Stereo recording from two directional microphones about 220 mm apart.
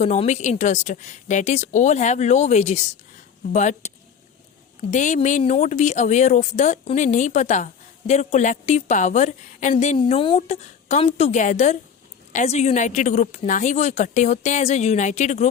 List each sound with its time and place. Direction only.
0.0 s speech: 30° left (ahead or behind)